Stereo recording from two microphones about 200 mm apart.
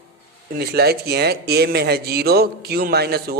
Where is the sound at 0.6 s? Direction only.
50° right (ahead or behind).